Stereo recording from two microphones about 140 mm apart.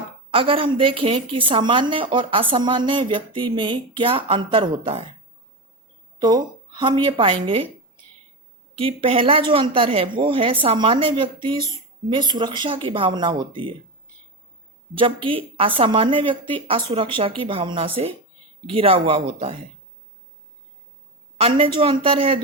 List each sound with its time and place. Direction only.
0.3 s a woman's voice: 40° right (ahead or behind)
6.1 s a woman's voice: 30° right (ahead or behind)
8.8 s a woman's voice: 40° right (ahead or behind)
14.9 s a woman's voice: 40° right (ahead or behind)
21.3 s a woman's voice: 45° right (ahead or behind)